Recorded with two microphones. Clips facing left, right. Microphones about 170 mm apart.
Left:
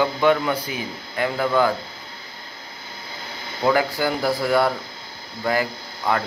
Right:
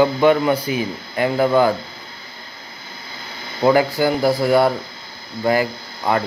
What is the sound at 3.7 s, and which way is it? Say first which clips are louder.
Speech: right 5 dB; 5° right (ahead or behind).